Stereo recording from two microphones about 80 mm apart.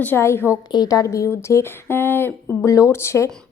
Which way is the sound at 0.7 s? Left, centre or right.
Left.